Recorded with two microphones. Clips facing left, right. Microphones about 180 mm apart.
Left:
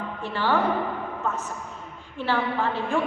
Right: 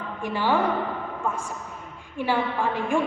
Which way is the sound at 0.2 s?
15° right (ahead or behind).